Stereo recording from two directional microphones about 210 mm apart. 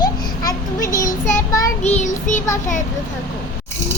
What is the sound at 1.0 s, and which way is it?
Child singing, 40° left (ahead or behind).